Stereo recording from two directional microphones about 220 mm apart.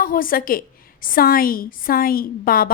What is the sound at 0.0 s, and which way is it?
A woman's voice, 40° left (ahead or behind).